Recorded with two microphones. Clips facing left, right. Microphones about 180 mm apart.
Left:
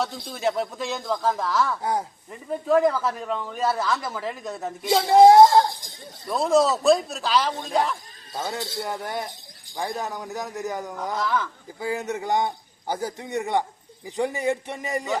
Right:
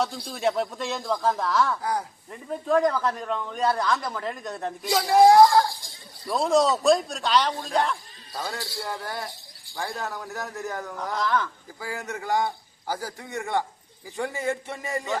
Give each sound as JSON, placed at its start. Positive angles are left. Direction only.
{"t": 0.3, "sound": "speech", "side_deg": 0}
{"t": 1.8, "sound": "a man's voice", "side_deg": 25}
{"t": 2.3, "sound": "speech", "side_deg": 0}
{"t": 4.9, "sound": "a man's voice", "side_deg": 25}
{"t": 6.2, "sound": "speech", "side_deg": 0}
{"t": 8.3, "sound": "a man's voice", "side_deg": 20}
{"t": 11.1, "sound": "speech", "side_deg": 0}
{"t": 11.8, "sound": "a man's voice", "side_deg": 20}